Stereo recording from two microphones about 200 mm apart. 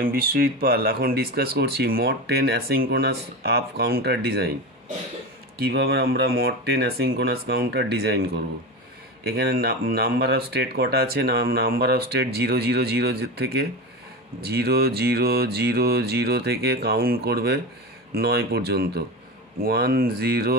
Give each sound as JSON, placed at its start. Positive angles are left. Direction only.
{"t": 0.0, "sound": "speech", "side_deg": -45}
{"t": 5.6, "sound": "speech", "side_deg": -50}